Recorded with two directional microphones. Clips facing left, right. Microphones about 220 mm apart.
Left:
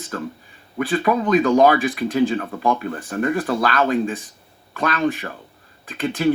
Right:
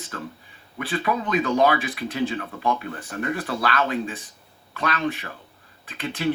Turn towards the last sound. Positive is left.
turn(degrees=45)  # may be behind; listen again after turning